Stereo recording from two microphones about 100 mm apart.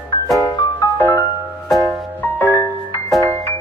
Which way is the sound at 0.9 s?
20° left (ahead or behind).